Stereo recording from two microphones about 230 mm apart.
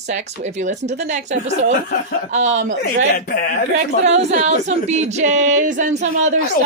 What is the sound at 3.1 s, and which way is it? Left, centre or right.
Speech, left.